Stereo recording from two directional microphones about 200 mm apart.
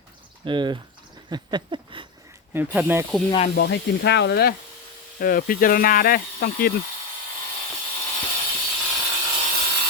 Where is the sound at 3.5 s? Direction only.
60° left (ahead or behind).